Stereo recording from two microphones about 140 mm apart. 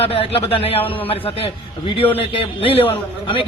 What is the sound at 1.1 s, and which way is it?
A man's voice, 40° left (ahead or behind).